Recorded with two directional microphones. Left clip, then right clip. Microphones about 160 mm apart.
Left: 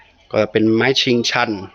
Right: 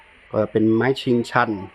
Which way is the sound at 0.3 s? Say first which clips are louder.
Left 4 dB; 10° left (ahead or behind).